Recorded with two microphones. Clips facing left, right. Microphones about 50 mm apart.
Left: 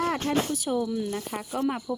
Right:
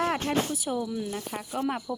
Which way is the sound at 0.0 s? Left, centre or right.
Centre.